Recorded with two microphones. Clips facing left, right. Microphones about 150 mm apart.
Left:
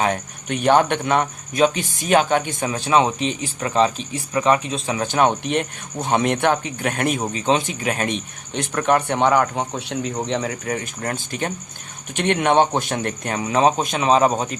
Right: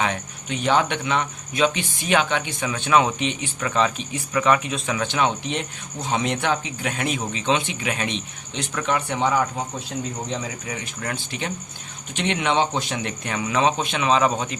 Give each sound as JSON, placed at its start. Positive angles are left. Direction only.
{"t": 0.0, "sound": "speech", "side_deg": 50}